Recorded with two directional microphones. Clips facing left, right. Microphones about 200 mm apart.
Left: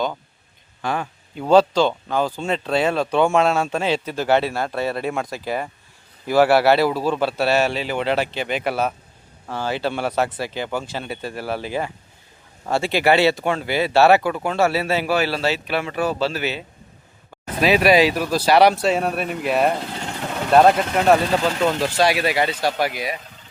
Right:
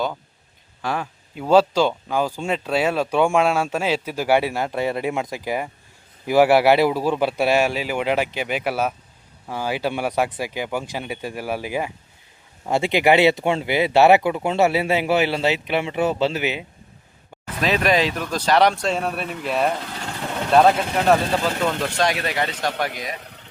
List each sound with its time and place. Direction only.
0.8 s speech: centre (ahead or behind)
17.6 s speech: 10° left (ahead or behind)
23.2 s boiling: 65° right (ahead or behind)